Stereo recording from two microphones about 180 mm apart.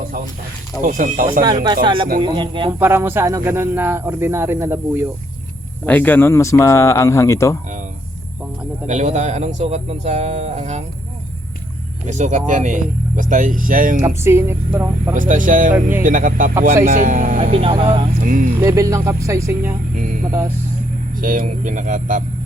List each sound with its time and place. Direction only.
0.8 s speech: 50° right (ahead or behind)
1.4 s speech: 25° right (ahead or behind)
2.7 s speech: 10° right (ahead or behind)
5.8 s speech: 10° left (ahead or behind)
8.9 s speech: 40° right (ahead or behind)
12.0 s speech: 40° right (ahead or behind)
14.0 s speech: 15° right (ahead or behind)
15.1 s speech: 45° right (ahead or behind)
15.7 s speech: 10° right (ahead or behind)
16.0 s speech: 50° right (ahead or behind)
17.5 s speech: 30° right (ahead or behind)
18.2 s speech: 45° right (ahead or behind)
18.6 s speech: 20° right (ahead or behind)
21.2 s speech: 50° right (ahead or behind)